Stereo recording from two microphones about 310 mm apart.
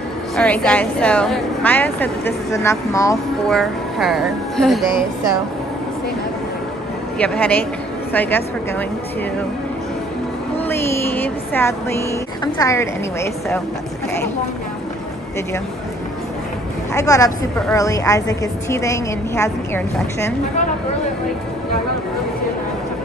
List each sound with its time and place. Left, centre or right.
0.4 s a woman's voice: centre
7.2 s a woman's voice: centre
10.6 s speech: centre
16.9 s a woman's voice: centre